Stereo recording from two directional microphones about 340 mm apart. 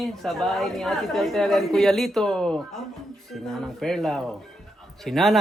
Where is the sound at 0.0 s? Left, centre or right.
Centre.